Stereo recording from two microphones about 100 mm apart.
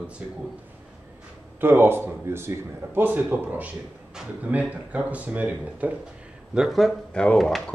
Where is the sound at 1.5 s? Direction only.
20° right (ahead or behind).